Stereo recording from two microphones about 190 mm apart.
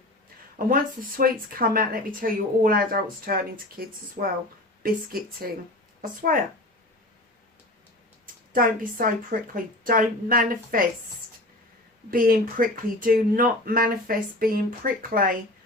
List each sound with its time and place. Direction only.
0.7 s speech: 50° right (ahead or behind)
5.4 s speech: 50° right (ahead or behind)
8.5 s speech: 50° right (ahead or behind)
12.1 s speech: 50° right (ahead or behind)